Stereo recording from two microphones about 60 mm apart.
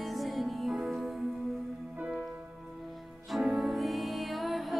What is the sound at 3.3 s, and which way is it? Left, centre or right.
Music, centre.